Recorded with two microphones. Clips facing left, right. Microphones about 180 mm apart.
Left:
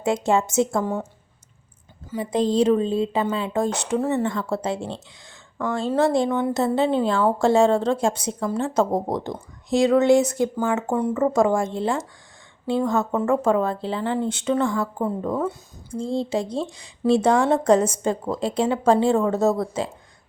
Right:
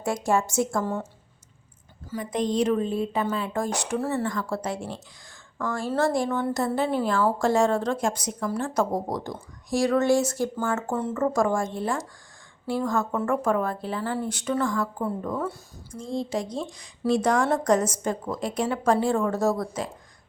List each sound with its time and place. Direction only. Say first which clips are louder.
0.0 s speech: left 4 dB; 20° left (ahead or behind)
2.0 s speech: left 5 dB; 25° left (ahead or behind)